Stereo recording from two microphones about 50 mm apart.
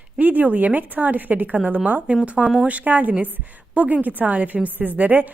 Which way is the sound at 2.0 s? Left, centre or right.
Right.